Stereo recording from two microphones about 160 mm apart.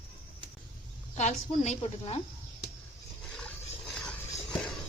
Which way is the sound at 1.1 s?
45° left (ahead or behind).